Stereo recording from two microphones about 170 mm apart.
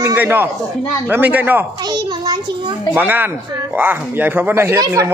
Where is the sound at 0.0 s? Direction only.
15° right (ahead or behind).